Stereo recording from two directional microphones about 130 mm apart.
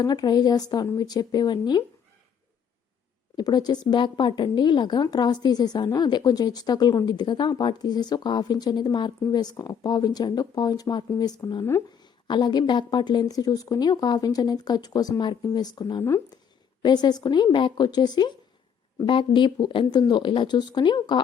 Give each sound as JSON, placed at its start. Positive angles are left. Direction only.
{"t": 0.0, "sound": "a woman's voice", "side_deg": 30}
{"t": 3.3, "sound": "a woman's voice", "side_deg": 30}
{"t": 16.8, "sound": "a woman's voice", "side_deg": 35}